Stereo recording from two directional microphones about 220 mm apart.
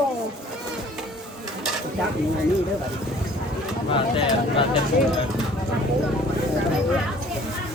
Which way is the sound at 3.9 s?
25° left (ahead or behind).